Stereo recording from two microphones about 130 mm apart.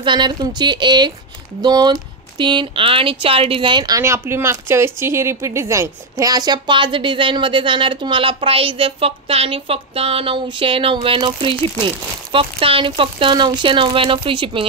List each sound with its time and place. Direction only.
0.0 s speech: 35° right (ahead or behind)
4.0 s speech: 20° right (ahead or behind); by 14.7 s 40° right (ahead or behind)